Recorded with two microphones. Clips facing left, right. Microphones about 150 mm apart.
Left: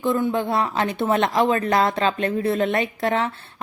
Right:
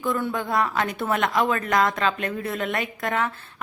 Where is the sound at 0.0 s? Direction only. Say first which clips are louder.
Left 5 dB; 20° left (ahead or behind).